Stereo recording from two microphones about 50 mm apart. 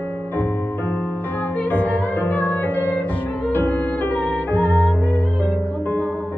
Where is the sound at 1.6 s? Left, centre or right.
Left.